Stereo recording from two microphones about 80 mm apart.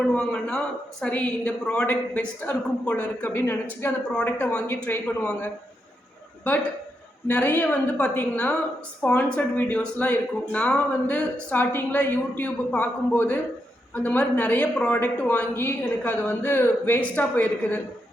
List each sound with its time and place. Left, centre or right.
0.0 s a woman's voice: centre
7.3 s a woman's voice: left
11.5 s a woman's voice: left